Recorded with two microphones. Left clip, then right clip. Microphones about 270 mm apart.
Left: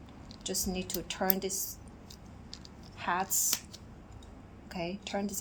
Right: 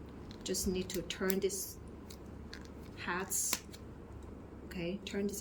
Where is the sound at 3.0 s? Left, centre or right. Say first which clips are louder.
Left 7 dB; centre.